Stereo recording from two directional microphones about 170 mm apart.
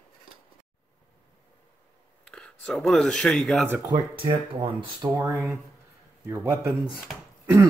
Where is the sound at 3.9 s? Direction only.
30° right (ahead or behind).